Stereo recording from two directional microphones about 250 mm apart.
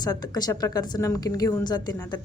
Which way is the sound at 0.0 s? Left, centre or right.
Centre.